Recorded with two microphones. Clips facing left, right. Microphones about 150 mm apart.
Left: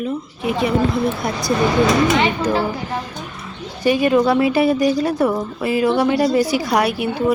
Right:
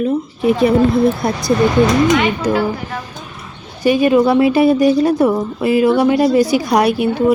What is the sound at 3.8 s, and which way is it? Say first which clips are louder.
A woman's voice: right 3 dB; 20° right (ahead or behind).